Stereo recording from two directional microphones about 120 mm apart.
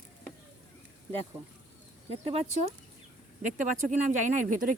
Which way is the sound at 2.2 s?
60° right (ahead or behind).